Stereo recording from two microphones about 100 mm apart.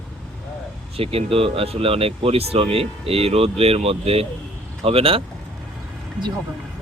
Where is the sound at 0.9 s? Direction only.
75° right (ahead or behind).